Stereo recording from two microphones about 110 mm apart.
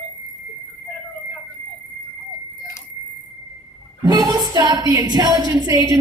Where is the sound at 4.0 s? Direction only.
35° right (ahead or behind).